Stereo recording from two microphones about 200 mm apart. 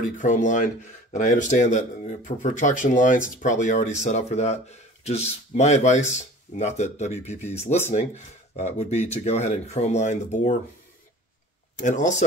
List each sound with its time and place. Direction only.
0.2 s speech: 40° left (ahead or behind)
11.8 s speech: 40° left (ahead or behind)